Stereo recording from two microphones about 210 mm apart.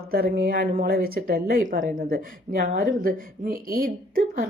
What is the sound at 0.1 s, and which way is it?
A woman's voice, 45° right (ahead or behind).